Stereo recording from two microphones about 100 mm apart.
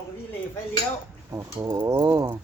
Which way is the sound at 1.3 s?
35° right (ahead or behind).